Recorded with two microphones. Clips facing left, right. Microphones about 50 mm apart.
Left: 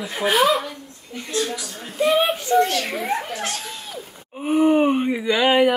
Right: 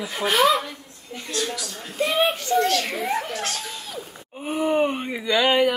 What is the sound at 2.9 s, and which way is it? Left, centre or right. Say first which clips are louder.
Speech: left 2 dB; centre.